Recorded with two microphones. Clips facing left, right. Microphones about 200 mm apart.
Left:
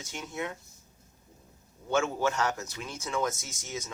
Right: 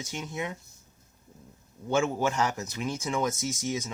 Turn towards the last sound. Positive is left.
turn(degrees=-15)  # may be behind; listen again after turning